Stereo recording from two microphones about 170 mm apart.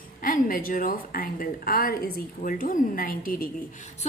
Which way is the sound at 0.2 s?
55° left (ahead or behind).